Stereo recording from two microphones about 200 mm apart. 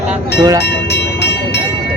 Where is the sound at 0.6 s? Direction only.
55° left (ahead or behind).